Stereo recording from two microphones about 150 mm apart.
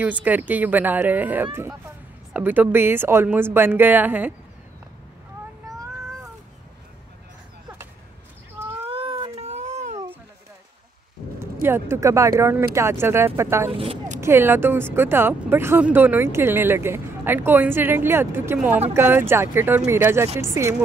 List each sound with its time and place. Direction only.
0.0 s speech: 10° right (ahead or behind)
8.8 s a sound: 40° right (ahead or behind)
9.4 s a sound: 50° right (ahead or behind)
11.6 s speech: 15° right (ahead or behind)
13.7 s speech: 40° right (ahead or behind)
14.2 s speech: 15° right (ahead or behind)